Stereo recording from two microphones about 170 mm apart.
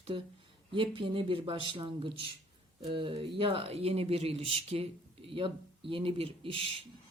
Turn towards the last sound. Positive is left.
turn(degrees=-35)  # may be behind; listen again after turning